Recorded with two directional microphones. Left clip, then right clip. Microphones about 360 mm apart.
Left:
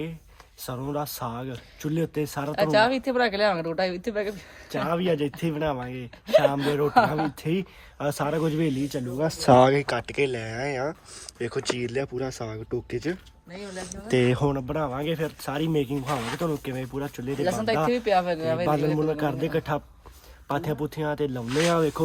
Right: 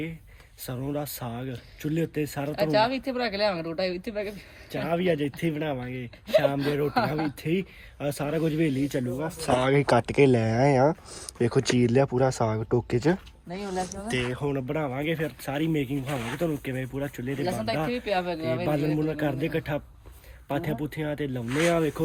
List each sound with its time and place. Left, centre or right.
0.6 s speech: centre
2.5 s speech: centre
4.9 s speech: centre
6.8 s speech: centre
7.4 s speech: centre
9.2 s speech: left
9.6 s speech: centre
14.1 s speech: left
14.5 s speech: centre
17.4 s speech: left
18.9 s speech: centre